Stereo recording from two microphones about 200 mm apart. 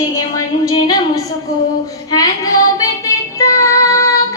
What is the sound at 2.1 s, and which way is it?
Music, 20° left (ahead or behind).